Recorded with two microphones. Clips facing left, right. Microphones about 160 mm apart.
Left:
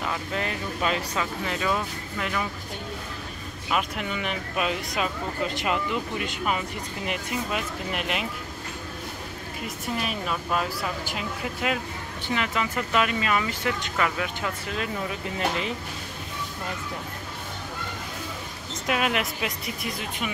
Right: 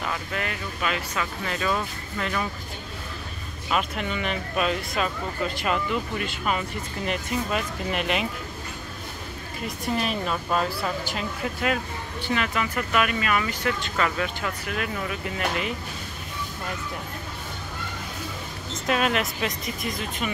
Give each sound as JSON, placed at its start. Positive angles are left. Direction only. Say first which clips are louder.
{"t": 0.3, "sound": "speech", "louder": "left 2 dB", "side_deg": 25}
{"t": 1.4, "sound": "speech", "louder": "right 1 dB", "side_deg": 15}
{"t": 3.7, "sound": "speech", "louder": "right 1 dB", "side_deg": 10}
{"t": 7.1, "sound": "speech", "louder": "right 3 dB", "side_deg": 5}
{"t": 9.9, "sound": "speech", "louder": "right 2 dB", "side_deg": 5}
{"t": 14.7, "sound": "speech", "louder": "right 2 dB", "side_deg": 25}
{"t": 18.9, "sound": "speech", "louder": "right 2 dB", "side_deg": 10}